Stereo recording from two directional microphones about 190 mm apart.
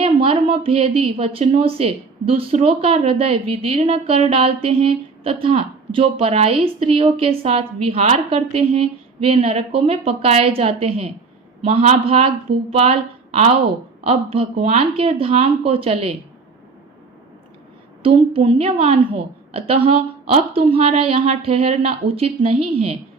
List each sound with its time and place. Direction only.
0.0 s a woman's voice: 30° right (ahead or behind)
18.0 s a woman's voice: 30° right (ahead or behind)